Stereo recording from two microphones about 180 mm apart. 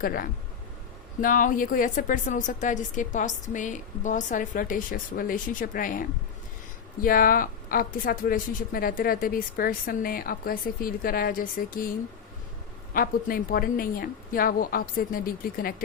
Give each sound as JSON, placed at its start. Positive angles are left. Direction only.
{"t": 0.0, "sound": "a woman's voice", "side_deg": 55}
{"t": 12.9, "sound": "a woman's voice", "side_deg": 50}